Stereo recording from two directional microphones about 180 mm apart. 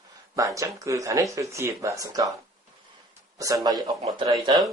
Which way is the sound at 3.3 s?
20° right (ahead or behind).